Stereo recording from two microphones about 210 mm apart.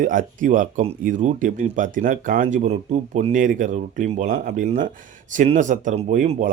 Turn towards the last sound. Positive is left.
turn(degrees=-35)  # may be behind; listen again after turning